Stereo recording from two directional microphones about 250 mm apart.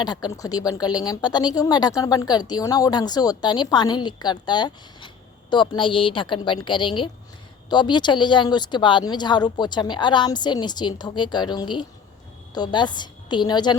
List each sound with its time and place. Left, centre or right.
0.0 s speech: centre